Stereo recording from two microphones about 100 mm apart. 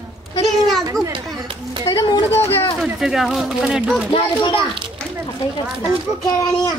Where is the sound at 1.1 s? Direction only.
55° right (ahead or behind).